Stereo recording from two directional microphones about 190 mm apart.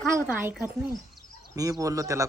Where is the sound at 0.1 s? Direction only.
10° right (ahead or behind).